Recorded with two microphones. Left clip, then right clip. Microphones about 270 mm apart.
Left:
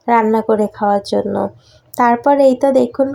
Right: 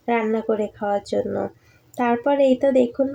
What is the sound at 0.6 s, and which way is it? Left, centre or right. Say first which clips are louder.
Speech: left 8 dB; centre.